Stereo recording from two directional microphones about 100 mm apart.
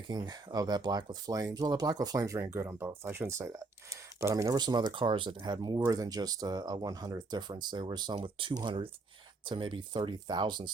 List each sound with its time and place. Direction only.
0.1 s speech: 45° right (ahead or behind)
2.6 s speech: 20° right (ahead or behind)
4.5 s speech: 45° right (ahead or behind)
8.1 s speech: 60° right (ahead or behind)